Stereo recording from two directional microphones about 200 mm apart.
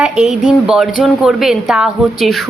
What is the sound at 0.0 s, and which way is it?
Speech, 5° right (ahead or behind).